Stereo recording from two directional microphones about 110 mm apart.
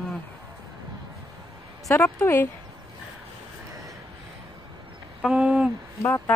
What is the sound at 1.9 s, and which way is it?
Speech, 20° left (ahead or behind).